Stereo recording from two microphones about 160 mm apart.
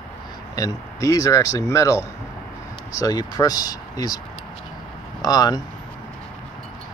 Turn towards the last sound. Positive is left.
turn(degrees=25)  # may be behind; listen again after turning